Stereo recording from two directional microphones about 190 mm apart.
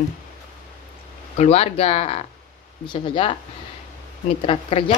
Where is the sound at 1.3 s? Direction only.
35° left (ahead or behind).